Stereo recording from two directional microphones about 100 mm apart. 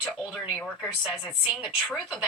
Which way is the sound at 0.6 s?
Centre (ahead or behind).